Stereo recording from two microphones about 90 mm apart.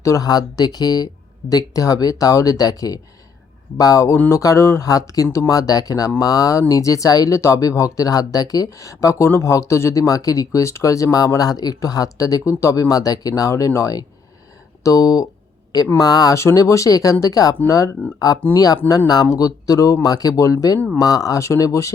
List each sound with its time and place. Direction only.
0.0 s speech: 40° left (ahead or behind)